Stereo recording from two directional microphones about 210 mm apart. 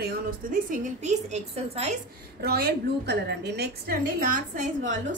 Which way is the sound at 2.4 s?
50° right (ahead or behind).